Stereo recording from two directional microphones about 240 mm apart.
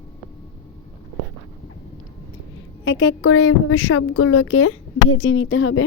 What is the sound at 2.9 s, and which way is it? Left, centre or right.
A woman's voice, left.